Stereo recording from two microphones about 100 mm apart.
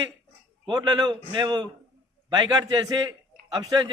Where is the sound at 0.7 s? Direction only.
45° right (ahead or behind).